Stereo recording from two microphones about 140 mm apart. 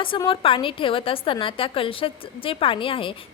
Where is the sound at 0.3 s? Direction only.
40° left (ahead or behind).